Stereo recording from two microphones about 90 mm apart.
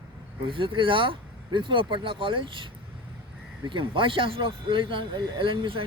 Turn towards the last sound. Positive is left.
turn(degrees=-75)  # may be behind; listen again after turning